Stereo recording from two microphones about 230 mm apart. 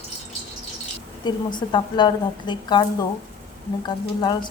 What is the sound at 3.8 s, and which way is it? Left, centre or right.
Speech, centre.